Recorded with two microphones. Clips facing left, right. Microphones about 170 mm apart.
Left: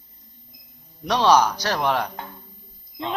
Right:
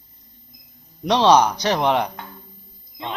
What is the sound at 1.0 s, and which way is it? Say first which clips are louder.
Speech: right 3 dB; 20° right (ahead or behind).